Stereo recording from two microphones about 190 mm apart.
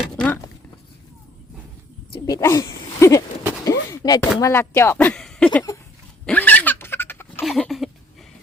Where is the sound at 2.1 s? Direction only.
20° left (ahead or behind).